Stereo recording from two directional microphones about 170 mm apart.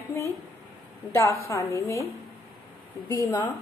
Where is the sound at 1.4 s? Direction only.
15° left (ahead or behind).